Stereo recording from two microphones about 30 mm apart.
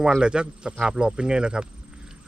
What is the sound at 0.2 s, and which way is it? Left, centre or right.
Speech, right.